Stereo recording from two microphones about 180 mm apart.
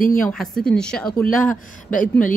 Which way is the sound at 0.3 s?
5° left (ahead or behind).